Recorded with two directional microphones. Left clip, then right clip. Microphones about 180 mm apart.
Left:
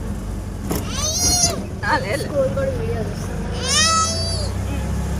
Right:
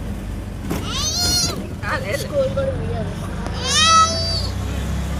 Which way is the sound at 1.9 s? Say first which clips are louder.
Left 3 dB; 55° left (ahead or behind).